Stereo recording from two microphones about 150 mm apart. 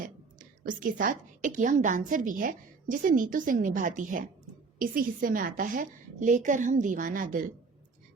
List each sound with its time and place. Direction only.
0.0 s a woman's voice: 65° right (ahead or behind)